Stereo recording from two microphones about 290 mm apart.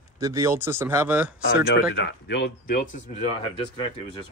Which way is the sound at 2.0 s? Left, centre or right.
Left.